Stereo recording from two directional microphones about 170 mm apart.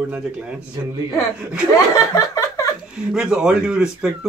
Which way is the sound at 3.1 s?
5° right (ahead or behind).